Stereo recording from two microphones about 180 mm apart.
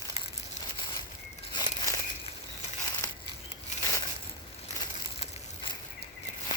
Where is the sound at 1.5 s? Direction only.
20° left (ahead or behind).